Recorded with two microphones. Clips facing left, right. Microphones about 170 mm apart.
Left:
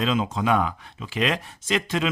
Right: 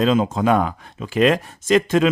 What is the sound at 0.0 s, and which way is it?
Speech, 45° right (ahead or behind).